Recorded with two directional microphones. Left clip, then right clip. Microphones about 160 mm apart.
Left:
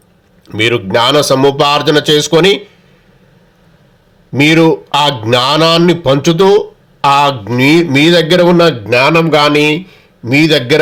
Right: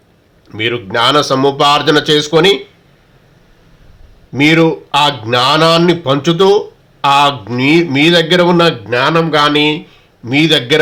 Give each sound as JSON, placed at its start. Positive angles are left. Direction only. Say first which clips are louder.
{"t": 0.4, "sound": "speech", "louder": "left 5 dB", "side_deg": 35}
{"t": 4.4, "sound": "a man's voice", "louder": "left 2 dB", "side_deg": 35}